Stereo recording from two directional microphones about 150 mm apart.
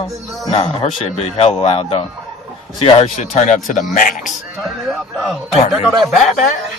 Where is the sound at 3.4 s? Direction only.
60° left (ahead or behind).